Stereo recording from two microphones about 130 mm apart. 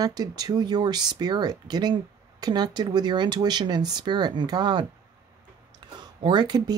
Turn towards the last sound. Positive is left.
turn(degrees=-35)  # may be behind; listen again after turning